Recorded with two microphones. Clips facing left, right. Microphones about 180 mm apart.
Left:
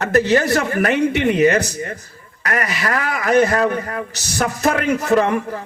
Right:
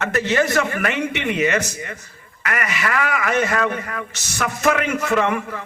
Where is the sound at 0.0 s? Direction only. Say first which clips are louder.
Left 4 dB; 35° left (ahead or behind).